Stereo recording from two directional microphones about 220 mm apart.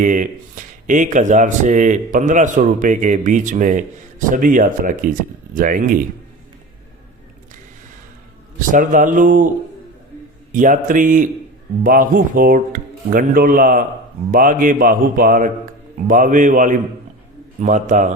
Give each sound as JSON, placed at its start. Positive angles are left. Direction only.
{"t": 0.0, "sound": "speech", "side_deg": -35}
{"t": 8.5, "sound": "speech", "side_deg": -35}
{"t": 10.5, "sound": "speech", "side_deg": -35}